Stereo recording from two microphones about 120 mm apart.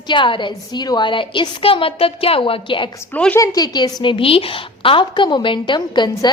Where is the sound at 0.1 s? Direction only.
40° left (ahead or behind).